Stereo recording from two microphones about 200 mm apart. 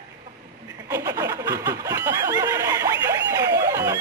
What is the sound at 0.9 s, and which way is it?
Snicker, 15° right (ahead or behind).